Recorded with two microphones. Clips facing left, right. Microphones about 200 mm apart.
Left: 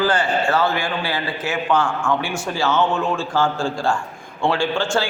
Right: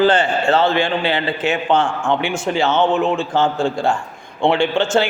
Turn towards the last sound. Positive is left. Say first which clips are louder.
# right 4 dB
turn(degrees=-20)  # may be behind; listen again after turning